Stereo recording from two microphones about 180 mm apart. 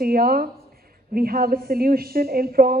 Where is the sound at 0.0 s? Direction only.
55° right (ahead or behind).